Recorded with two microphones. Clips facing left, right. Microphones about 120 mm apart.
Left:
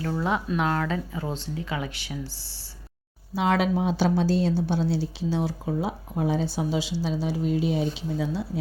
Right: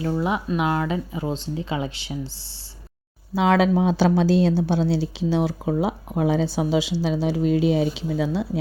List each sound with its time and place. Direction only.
0.0 s speech: 15° right (ahead or behind)
3.9 s speech: 90° right